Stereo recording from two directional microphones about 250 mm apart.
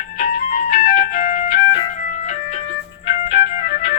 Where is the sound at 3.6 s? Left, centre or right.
Left.